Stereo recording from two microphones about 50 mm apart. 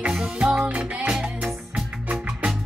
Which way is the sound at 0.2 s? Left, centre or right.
Centre.